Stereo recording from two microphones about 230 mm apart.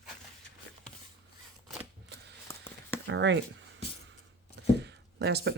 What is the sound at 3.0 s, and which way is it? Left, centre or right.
Speech, right.